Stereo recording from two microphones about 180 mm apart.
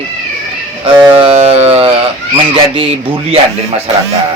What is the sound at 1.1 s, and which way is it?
Speech, 35° right (ahead or behind).